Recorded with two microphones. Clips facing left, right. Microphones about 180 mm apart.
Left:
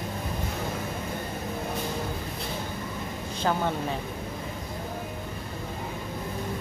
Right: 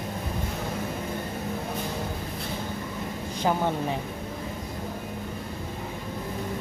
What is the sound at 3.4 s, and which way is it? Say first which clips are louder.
Speech: right 2 dB; 15° right (ahead or behind).